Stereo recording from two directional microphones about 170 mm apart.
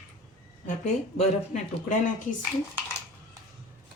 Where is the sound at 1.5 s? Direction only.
50° left (ahead or behind).